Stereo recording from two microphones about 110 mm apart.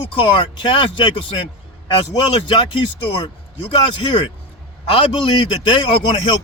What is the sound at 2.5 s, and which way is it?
Speech, 45° left (ahead or behind).